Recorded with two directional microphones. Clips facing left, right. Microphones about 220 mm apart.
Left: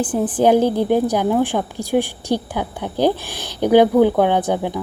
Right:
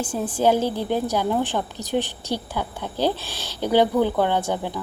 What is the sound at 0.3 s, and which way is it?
Speech, 15° left (ahead or behind).